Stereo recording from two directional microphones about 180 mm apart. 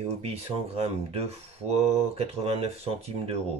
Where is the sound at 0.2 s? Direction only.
35° right (ahead or behind).